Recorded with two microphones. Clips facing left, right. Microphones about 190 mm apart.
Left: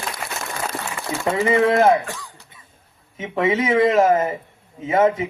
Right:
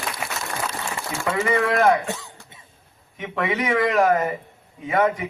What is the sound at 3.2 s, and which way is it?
A man's voice, 25° left (ahead or behind).